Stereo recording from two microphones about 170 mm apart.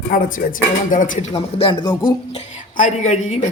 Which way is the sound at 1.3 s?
30° left (ahead or behind).